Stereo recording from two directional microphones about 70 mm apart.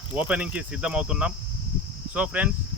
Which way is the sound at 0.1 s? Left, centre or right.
Centre.